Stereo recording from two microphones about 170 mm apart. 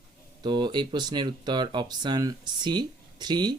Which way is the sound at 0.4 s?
25° right (ahead or behind).